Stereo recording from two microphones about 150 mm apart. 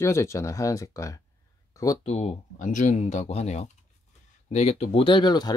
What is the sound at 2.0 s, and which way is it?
Speech, 45° left (ahead or behind).